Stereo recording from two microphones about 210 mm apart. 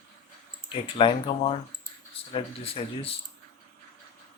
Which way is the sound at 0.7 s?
25° left (ahead or behind).